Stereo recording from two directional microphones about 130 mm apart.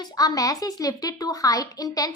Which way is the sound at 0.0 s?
30° left (ahead or behind).